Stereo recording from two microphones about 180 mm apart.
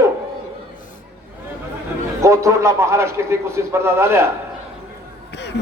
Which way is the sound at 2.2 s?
15° right (ahead or behind).